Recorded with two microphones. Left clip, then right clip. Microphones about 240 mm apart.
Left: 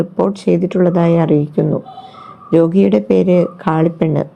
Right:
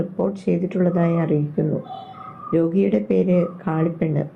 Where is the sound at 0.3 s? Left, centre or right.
Left.